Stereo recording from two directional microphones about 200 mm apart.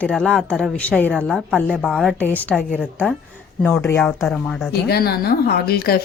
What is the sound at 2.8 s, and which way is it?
Speech, 5° right (ahead or behind).